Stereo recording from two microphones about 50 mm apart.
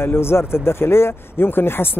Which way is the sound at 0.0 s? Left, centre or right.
Left.